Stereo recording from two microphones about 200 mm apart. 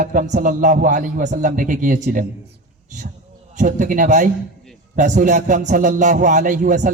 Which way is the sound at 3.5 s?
40° right (ahead or behind).